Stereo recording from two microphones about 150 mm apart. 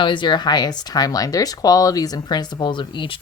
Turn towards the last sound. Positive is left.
turn(degrees=35)  # may be behind; listen again after turning